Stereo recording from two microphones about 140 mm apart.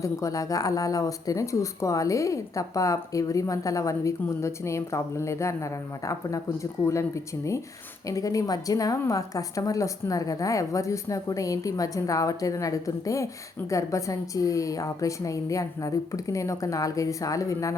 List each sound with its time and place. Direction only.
0.0 s speech: 25° left (ahead or behind)
8.0 s speech: 25° left (ahead or behind)